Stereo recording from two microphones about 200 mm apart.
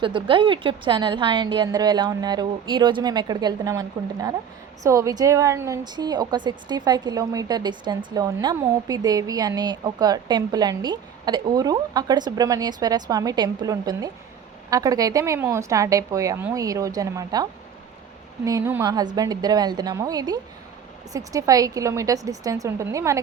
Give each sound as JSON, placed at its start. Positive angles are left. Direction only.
{"t": 0.0, "sound": "a woman's voice", "side_deg": -25}